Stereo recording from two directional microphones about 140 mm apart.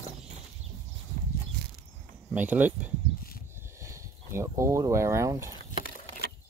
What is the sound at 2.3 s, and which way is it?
Speech, 10° right (ahead or behind).